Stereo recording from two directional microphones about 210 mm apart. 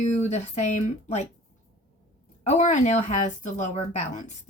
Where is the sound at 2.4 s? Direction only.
35° left (ahead or behind).